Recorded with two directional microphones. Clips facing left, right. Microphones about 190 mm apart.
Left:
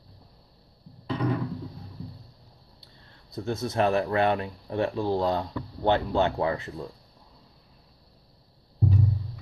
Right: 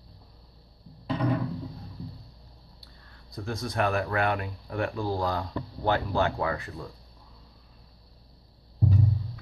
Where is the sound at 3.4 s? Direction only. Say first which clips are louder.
Left 3 dB; 25° left (ahead or behind).